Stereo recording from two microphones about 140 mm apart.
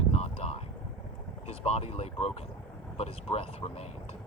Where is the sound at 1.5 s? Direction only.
50° left (ahead or behind).